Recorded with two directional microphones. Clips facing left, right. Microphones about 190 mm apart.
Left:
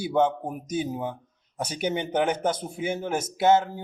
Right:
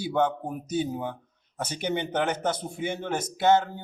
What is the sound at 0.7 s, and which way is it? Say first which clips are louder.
Speech: even; 10° left (ahead or behind).